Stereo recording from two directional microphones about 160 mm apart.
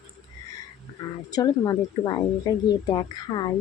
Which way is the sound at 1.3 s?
25° left (ahead or behind).